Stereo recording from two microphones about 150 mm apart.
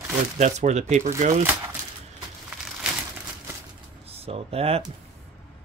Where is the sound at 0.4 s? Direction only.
50° right (ahead or behind).